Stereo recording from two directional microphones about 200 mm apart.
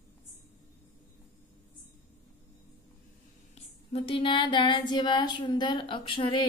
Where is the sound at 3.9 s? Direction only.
25° left (ahead or behind).